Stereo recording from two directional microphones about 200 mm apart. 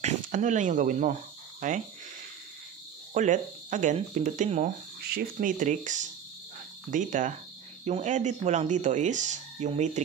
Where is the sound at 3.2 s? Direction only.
40° right (ahead or behind).